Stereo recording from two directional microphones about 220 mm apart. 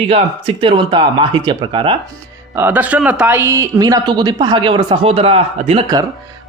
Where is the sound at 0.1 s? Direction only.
25° right (ahead or behind).